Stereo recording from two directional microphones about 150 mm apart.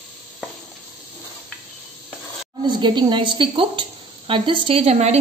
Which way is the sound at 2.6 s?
30° right (ahead or behind).